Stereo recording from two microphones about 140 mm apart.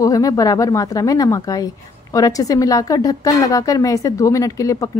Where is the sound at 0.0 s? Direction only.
25° left (ahead or behind).